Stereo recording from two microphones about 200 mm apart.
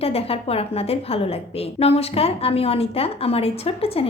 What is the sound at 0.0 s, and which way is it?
A woman's voice, 30° left (ahead or behind).